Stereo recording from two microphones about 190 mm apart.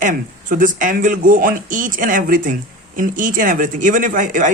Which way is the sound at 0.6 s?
45° right (ahead or behind).